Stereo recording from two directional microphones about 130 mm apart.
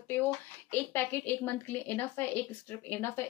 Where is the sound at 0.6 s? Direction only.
15° left (ahead or behind).